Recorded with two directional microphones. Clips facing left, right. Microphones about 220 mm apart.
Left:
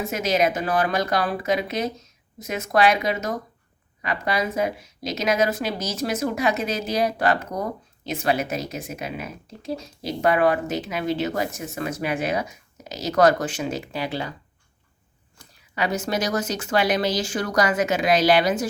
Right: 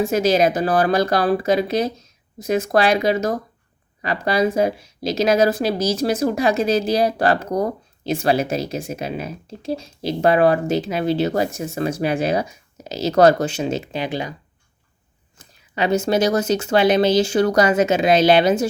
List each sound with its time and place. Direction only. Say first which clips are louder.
0.0 s speech: right 6 dB; 30° right (ahead or behind); by 14.3 s 15° right (ahead or behind)
15.4 s speech: right 4 dB; 25° right (ahead or behind)